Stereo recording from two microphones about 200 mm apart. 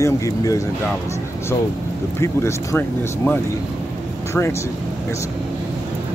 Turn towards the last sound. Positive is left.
turn(degrees=15)  # may be behind; listen again after turning